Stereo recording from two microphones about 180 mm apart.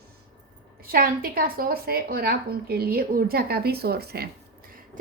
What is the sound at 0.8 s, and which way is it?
A woman's voice, 55° right (ahead or behind).